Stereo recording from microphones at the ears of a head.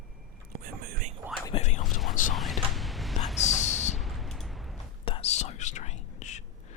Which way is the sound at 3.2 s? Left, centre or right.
Left.